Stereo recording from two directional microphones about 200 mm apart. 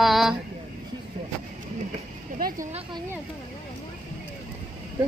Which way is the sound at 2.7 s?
30° right (ahead or behind).